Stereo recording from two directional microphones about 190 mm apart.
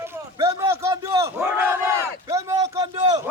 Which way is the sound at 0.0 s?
15° right (ahead or behind).